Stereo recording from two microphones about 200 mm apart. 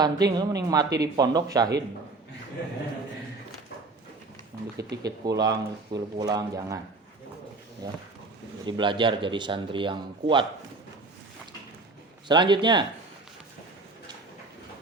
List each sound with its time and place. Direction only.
0.0 s speech: 20° right (ahead or behind)
4.8 s speech: 20° right (ahead or behind)
7.8 s speech: 20° right (ahead or behind)
12.3 s speech: 20° right (ahead or behind)